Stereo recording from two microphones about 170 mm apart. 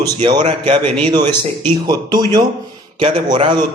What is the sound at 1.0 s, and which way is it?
Speech, 25° right (ahead or behind).